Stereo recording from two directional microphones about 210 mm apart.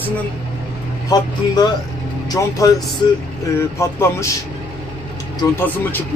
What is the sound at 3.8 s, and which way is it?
Speech, 15° left (ahead or behind).